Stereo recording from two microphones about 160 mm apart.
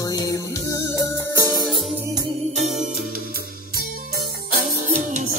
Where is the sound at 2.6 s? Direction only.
45° right (ahead or behind).